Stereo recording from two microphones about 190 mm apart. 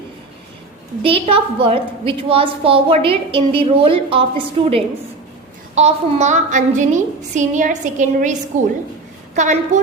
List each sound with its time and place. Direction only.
1.0 s a woman's voice: 30° right (ahead or behind)